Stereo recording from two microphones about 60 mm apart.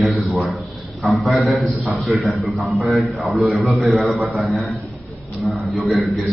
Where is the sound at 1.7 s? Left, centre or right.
Right.